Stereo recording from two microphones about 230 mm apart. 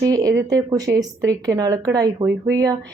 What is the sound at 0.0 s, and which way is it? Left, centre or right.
A woman's voice, centre.